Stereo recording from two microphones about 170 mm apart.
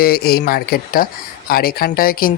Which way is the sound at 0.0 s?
65° left (ahead or behind).